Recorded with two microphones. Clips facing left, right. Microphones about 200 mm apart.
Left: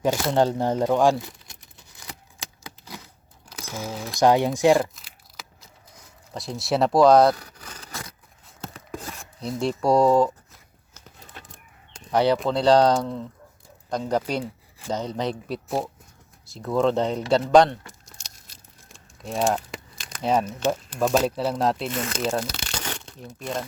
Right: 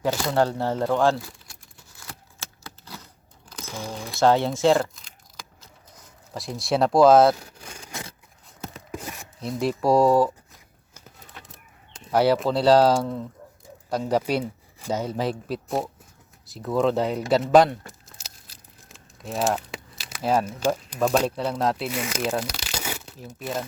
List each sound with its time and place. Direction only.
0.0 s crumpling: 20° left (ahead or behind)
3.5 s speech: 10° left (ahead or behind)
4.2 s speech: 15° left (ahead or behind)
4.9 s a sound: 5° left (ahead or behind)
6.3 s speech: centre (ahead or behind)
11.9 s speech: 5° right (ahead or behind)
18.0 s tearing: centre (ahead or behind)